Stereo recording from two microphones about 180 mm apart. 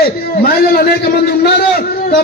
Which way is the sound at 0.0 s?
60° left (ahead or behind).